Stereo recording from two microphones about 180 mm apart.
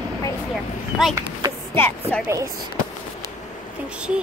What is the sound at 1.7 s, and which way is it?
Speech, 15° left (ahead or behind).